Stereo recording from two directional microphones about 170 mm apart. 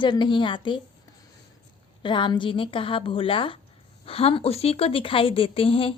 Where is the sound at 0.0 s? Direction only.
25° left (ahead or behind).